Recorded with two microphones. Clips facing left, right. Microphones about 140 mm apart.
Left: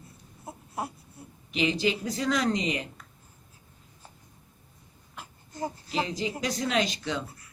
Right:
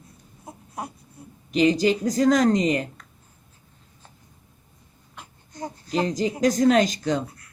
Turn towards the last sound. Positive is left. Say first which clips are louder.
# right 7 dB
turn(degrees=-45)  # may be behind; listen again after turning